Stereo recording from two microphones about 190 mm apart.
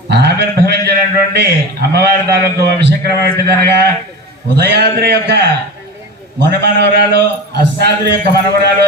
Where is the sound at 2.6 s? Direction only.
60° right (ahead or behind).